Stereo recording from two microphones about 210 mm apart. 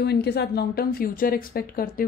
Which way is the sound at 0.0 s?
50° left (ahead or behind).